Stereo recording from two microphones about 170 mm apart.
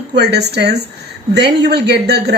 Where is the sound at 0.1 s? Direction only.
80° right.